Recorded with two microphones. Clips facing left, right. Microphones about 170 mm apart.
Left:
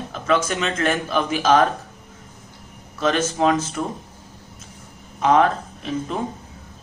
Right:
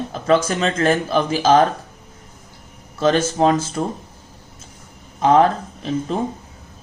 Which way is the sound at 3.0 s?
35° right (ahead or behind).